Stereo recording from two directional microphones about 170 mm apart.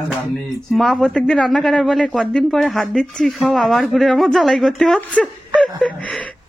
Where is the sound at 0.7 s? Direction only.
Centre (ahead or behind).